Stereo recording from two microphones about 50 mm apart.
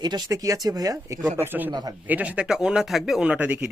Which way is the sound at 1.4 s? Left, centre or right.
Right.